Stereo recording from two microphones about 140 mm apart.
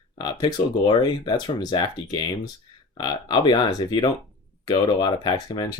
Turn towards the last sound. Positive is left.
turn(degrees=30)  # may be behind; listen again after turning